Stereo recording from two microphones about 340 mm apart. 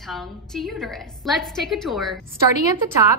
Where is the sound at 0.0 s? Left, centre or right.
Centre.